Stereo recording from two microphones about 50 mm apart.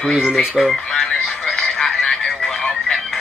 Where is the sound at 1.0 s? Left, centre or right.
Centre.